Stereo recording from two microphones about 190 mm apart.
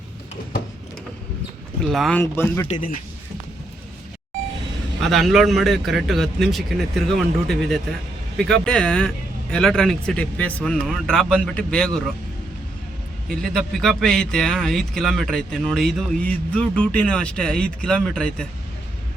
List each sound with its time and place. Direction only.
1.8 s speech: centre (ahead or behind)
2.6 s speech: 40° left (ahead or behind)
4.9 s a man's voice: centre (ahead or behind)
13.2 s a man's voice: centre (ahead or behind)